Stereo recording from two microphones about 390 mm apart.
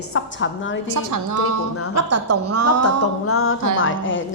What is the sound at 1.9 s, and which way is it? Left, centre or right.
Speech, right.